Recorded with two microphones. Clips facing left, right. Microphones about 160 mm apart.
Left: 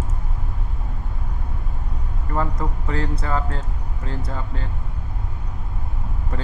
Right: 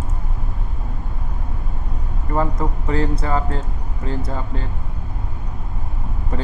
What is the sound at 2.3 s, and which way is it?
Speech, 20° right (ahead or behind).